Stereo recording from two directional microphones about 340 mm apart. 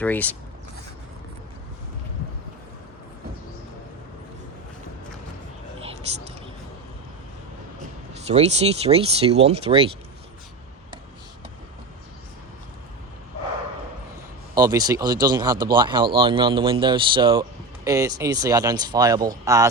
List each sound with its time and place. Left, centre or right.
0.0 s speech: centre
8.3 s speech: centre
14.5 s speech: centre